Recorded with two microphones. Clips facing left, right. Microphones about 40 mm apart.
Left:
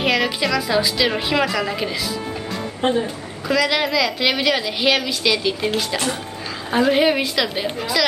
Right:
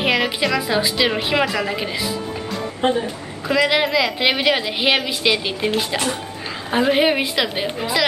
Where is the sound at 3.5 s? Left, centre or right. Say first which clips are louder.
Right 2 dB; centre.